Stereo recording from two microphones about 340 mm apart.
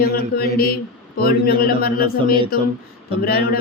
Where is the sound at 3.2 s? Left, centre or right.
Left.